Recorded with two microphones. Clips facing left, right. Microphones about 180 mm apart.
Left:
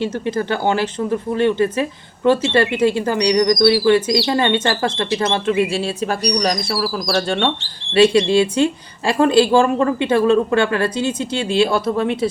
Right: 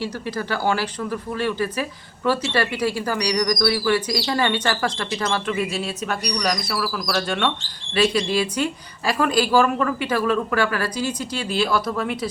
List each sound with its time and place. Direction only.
0.0 s a woman's voice: 25° left (ahead or behind)